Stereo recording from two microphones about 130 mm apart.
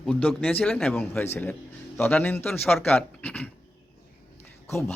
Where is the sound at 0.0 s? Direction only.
10° left (ahead or behind).